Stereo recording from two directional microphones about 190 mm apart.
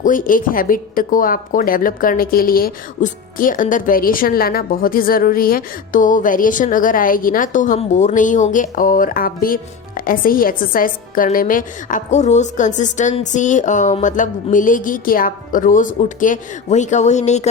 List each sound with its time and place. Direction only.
0.0 s speech: 45° left (ahead or behind)